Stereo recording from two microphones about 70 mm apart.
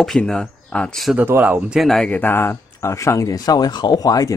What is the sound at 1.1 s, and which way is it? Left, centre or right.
Speech, right.